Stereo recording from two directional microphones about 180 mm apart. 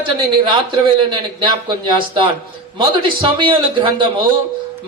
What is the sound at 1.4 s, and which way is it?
A man's voice, 25° right (ahead or behind).